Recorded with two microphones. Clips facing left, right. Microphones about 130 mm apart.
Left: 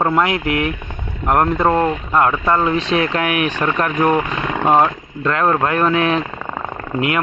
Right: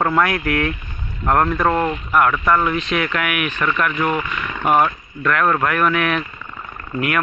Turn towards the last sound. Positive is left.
turn(degrees=25)  # may be behind; listen again after turning